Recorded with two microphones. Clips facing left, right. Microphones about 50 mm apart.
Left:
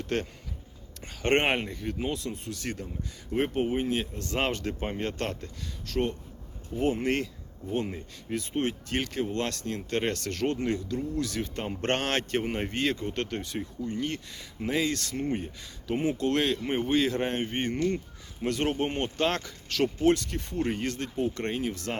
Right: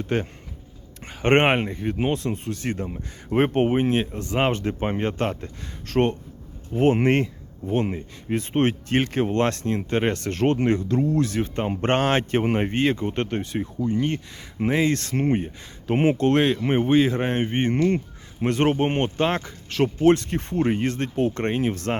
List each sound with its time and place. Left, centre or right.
0.1 s speech: centre
1.0 s speech: right
2.0 s speech: right
2.8 s speech: right
4.2 s speech: right
5.8 s speech: right
10.4 s speech: right
11.2 s speech: right
15.1 s speech: right
16.3 s speech: right
17.7 s speech: right
19.1 s speech: right
21.2 s speech: right